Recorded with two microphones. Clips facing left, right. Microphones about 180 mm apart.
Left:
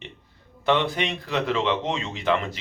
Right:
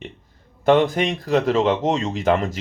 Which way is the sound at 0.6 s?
45° right (ahead or behind).